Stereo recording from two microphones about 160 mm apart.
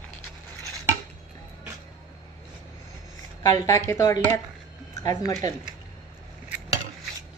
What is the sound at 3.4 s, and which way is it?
Speech, 20° left (ahead or behind).